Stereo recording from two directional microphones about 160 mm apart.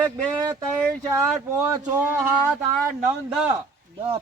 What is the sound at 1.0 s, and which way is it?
Speech, 20° right (ahead or behind).